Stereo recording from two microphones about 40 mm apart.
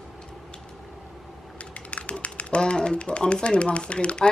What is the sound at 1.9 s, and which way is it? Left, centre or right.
Speech, left.